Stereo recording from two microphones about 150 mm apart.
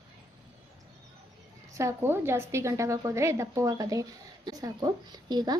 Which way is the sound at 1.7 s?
20° right (ahead or behind).